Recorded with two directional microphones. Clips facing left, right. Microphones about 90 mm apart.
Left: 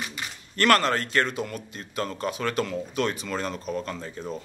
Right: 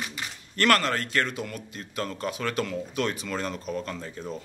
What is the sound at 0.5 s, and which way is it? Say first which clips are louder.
Speech: left 2 dB; 30° left (ahead or behind).